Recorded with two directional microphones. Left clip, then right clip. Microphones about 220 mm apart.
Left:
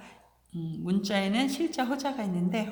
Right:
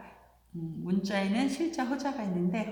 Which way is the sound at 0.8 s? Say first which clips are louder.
Left 2 dB; 45° left (ahead or behind).